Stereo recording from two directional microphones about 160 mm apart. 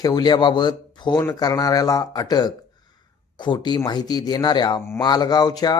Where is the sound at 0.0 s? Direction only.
25° left (ahead or behind).